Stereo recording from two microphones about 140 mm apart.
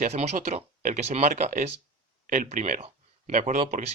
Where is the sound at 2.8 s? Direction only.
60° right (ahead or behind).